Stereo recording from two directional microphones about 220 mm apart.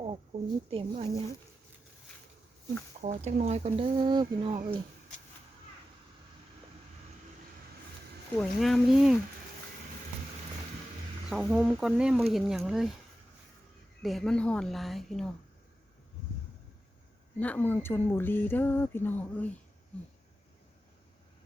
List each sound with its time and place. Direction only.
0.7 s speech: 25° right (ahead or behind)
3.0 s speech: 30° right (ahead or behind)
8.4 s a woman's voice: centre (ahead or behind)
11.3 s a woman's voice: centre (ahead or behind)
14.0 s a woman's voice: centre (ahead or behind)
17.4 s speech: 5° left (ahead or behind)